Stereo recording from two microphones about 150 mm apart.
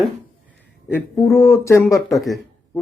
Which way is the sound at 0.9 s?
20° left (ahead or behind).